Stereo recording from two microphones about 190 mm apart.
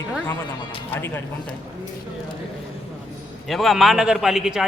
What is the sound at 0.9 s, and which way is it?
Speech, 10° left (ahead or behind).